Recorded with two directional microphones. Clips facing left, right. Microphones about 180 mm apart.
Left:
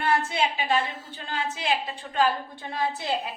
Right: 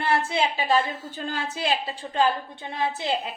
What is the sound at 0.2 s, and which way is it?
Speech, 30° right (ahead or behind).